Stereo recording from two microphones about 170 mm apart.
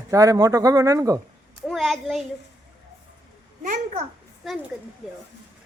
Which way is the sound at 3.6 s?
45° right (ahead or behind).